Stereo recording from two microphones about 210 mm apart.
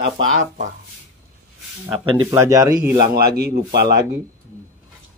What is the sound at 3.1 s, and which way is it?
Speech, 50° right (ahead or behind).